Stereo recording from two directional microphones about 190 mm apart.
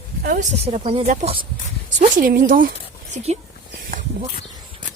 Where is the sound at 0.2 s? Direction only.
45° right (ahead or behind).